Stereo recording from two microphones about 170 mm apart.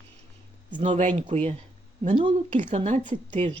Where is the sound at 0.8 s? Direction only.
45° right (ahead or behind).